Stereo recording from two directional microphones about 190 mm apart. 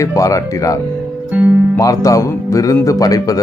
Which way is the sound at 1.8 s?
15° left (ahead or behind).